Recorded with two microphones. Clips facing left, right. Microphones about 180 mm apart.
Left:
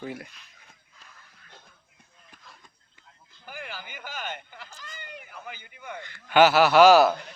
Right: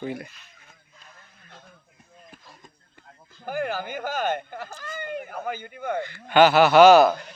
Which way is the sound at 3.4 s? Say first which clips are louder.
Right 13 dB; 45° right (ahead or behind).